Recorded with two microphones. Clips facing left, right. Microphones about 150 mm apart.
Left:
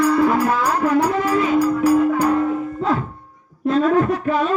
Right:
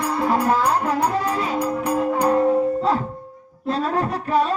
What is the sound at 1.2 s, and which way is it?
Music, 35° right (ahead or behind).